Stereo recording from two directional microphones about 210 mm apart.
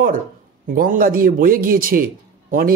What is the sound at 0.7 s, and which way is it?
Speech, 40° right (ahead or behind).